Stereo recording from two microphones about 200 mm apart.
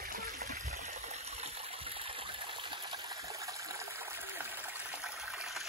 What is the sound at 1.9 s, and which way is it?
Water, 25° right (ahead or behind).